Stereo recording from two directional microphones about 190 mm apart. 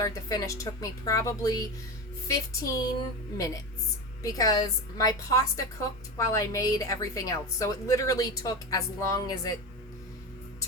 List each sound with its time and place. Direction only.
0.0 s a woman's voice: 15° left (ahead or behind)